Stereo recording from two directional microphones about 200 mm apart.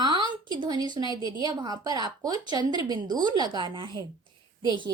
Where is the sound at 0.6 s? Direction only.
20° right (ahead or behind).